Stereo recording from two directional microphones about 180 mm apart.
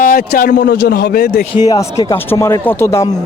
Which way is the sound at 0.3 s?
60° left (ahead or behind).